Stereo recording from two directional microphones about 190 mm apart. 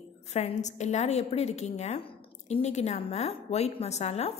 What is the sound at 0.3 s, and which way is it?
A woman's voice, 35° left (ahead or behind).